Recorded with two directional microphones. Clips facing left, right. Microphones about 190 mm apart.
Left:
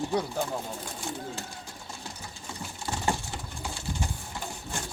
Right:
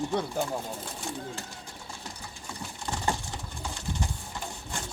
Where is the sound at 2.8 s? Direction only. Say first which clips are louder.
Left 1 dB; 15° left (ahead or behind).